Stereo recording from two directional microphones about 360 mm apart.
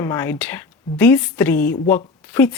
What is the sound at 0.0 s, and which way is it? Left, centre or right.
Speech, centre.